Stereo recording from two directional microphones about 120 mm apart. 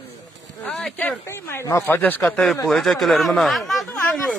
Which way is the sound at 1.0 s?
20° left (ahead or behind).